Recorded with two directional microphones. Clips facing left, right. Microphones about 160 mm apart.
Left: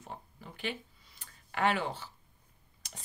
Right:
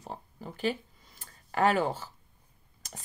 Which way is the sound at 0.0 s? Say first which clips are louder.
Right 5 dB; 40° right (ahead or behind).